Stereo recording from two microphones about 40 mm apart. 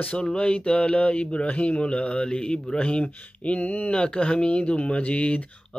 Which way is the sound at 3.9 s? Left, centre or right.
Left.